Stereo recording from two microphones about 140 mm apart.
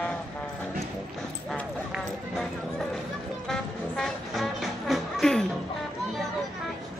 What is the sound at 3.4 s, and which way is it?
Music, 5° left (ahead or behind).